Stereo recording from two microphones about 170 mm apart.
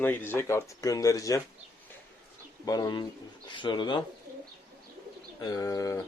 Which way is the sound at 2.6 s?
25° left (ahead or behind).